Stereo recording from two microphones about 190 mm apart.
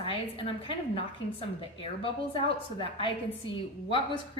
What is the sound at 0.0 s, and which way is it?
A woman's voice, 30° left (ahead or behind).